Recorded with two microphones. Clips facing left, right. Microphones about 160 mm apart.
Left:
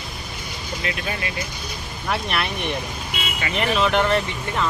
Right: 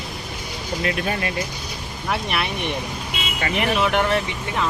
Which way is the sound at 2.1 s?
10° right (ahead or behind).